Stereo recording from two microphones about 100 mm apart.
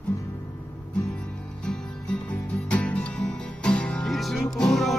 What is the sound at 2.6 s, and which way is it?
Music, 10° left (ahead or behind).